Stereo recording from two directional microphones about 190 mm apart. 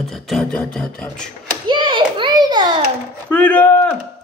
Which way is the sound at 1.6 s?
25° right (ahead or behind).